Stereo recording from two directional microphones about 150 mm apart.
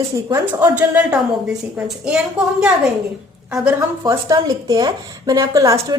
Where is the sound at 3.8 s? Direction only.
20° right (ahead or behind).